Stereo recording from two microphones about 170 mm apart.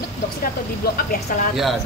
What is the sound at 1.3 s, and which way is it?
Speech, 50° left (ahead or behind).